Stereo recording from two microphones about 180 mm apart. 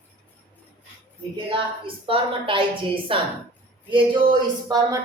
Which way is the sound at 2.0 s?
30° right (ahead or behind).